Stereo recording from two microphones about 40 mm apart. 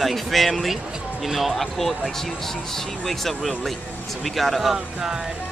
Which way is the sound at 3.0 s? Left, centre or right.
Centre.